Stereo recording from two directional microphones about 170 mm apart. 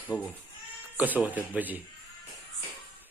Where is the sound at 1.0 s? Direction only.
10° right (ahead or behind).